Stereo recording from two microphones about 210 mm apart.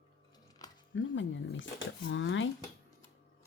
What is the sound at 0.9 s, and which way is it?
Music, 60° left (ahead or behind).